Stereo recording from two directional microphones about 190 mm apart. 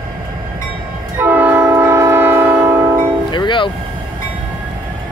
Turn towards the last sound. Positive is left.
turn(degrees=25)  # may be behind; listen again after turning